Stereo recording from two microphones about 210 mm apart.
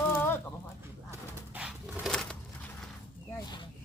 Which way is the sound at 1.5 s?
5° right (ahead or behind).